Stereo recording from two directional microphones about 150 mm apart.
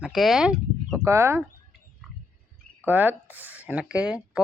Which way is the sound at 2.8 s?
10° right (ahead or behind).